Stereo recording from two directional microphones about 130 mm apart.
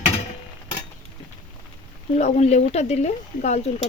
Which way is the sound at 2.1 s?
60° left (ahead or behind).